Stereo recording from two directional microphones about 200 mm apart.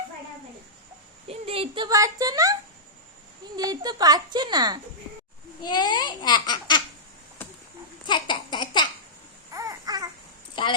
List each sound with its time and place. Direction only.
1.3 s a child's voice: 30° right (ahead or behind)
5.6 s speech: 20° left (ahead or behind)
8.0 s laughter: 20° left (ahead or behind)
9.5 s babbling: 15° right (ahead or behind)
10.5 s a sound: 25° left (ahead or behind)